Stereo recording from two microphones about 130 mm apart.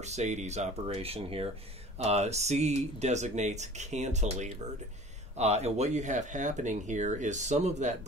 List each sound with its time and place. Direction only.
0.0 s speech: 60° right (ahead or behind)